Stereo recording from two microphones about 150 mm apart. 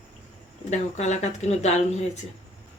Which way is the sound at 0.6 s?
50° left (ahead or behind).